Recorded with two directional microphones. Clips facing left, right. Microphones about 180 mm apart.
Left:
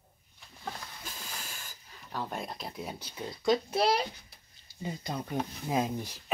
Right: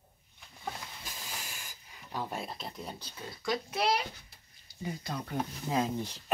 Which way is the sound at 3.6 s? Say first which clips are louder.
Left 3 dB; 35° left (ahead or behind).